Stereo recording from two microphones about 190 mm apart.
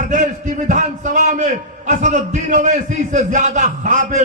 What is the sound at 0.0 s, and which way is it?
A man's voice, 40° right (ahead or behind).